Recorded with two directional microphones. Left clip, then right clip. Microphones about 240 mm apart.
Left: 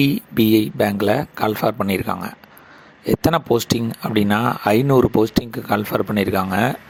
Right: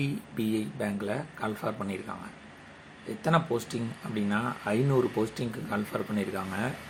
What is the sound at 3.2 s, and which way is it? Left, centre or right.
Speech, left.